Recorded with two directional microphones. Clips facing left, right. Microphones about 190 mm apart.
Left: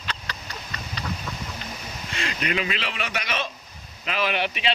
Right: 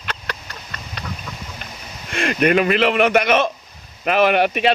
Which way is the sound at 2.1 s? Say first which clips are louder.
Right 12 dB; 55° right (ahead or behind).